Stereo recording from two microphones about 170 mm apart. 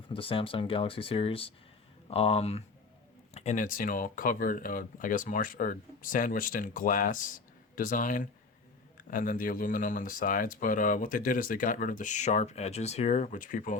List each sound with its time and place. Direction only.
0.1 s speech: 30° left (ahead or behind); by 13.7 s 50° left (ahead or behind)